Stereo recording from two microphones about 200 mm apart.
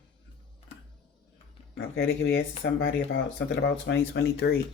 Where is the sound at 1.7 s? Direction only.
55° left (ahead or behind).